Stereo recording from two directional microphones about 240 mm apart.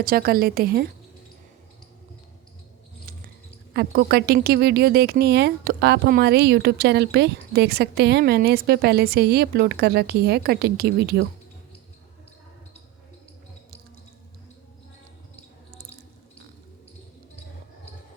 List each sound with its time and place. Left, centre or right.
0.0 s speech: right
3.7 s speech: right